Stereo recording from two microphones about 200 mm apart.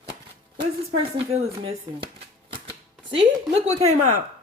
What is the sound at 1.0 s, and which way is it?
Speech, 30° right (ahead or behind).